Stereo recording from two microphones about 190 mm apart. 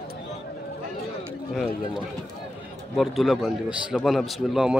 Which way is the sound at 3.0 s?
Centre (ahead or behind).